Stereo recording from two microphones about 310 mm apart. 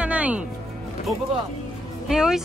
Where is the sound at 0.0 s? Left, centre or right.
Centre.